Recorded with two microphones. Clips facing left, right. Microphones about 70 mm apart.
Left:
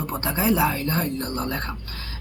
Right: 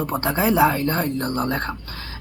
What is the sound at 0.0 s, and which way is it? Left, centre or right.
A woman's voice, right.